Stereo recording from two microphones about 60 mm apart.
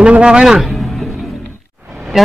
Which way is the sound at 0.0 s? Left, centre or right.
Centre.